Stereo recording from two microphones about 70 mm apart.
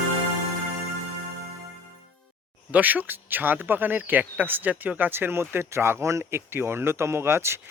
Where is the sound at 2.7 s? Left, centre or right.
Right.